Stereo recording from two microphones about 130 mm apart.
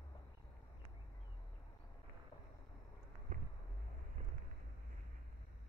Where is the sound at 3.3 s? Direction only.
80° right.